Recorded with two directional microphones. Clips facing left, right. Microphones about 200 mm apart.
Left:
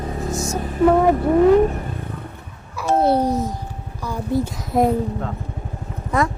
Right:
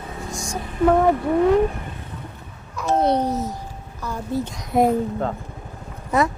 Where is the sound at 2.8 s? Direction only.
5° left (ahead or behind).